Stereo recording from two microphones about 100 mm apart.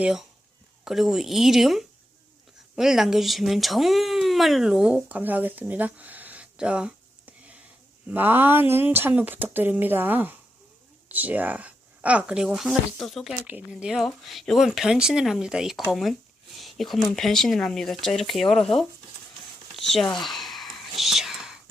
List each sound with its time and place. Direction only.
0.0 s speech: 5° right (ahead or behind)
13.3 s speech: 15° right (ahead or behind); by 18.9 s centre (ahead or behind)
19.7 s whispering: centre (ahead or behind)